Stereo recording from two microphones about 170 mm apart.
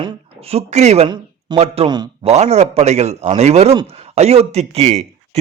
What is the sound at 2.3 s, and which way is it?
Speech, 40° right (ahead or behind).